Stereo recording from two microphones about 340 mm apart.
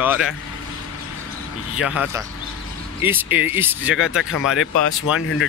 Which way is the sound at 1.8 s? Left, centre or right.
Centre.